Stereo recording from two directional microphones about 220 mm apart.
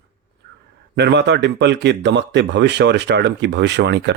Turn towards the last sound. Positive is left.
turn(degrees=-50)  # may be behind; listen again after turning